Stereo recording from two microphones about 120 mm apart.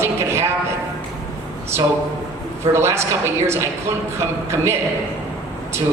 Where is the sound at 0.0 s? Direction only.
20° right (ahead or behind).